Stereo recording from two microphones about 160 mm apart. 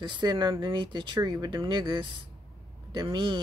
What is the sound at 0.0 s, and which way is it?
Speech, 30° right (ahead or behind).